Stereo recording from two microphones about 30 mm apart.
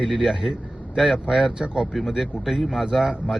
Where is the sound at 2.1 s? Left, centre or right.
Centre.